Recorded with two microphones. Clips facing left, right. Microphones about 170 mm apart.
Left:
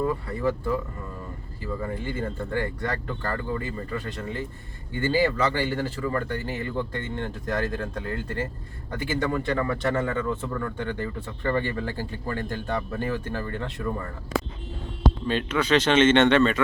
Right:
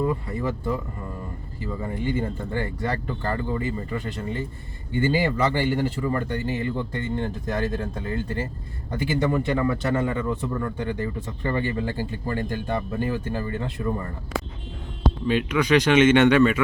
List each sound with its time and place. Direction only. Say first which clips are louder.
0.0 s speech: even; 10° right (ahead or behind)
8.9 s speech: right 3 dB; 10° right (ahead or behind)
15.3 s speech: right 4 dB; 10° right (ahead or behind)